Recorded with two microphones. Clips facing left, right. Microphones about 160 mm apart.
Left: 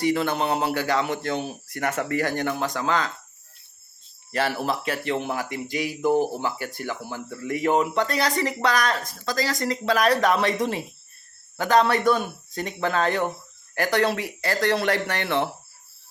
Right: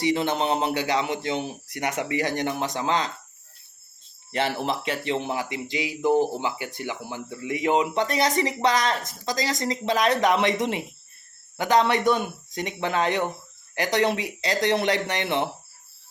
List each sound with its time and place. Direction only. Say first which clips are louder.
0.0 s speech: even; 20° right (ahead or behind)
4.3 s speech: left 1 dB; 25° right (ahead or behind)
5.7 s speech: left 2 dB; 45° left (ahead or behind)
6.7 s speech: left 1 dB; 20° right (ahead or behind)